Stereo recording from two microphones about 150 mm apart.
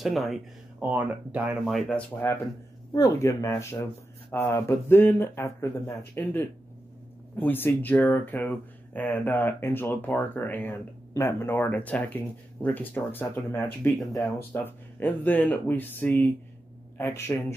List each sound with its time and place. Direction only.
0.0 s speech: centre (ahead or behind)
0.8 s speech: 10° right (ahead or behind)
1.7 s speech: 5° left (ahead or behind)
2.9 s speech: 20° left (ahead or behind)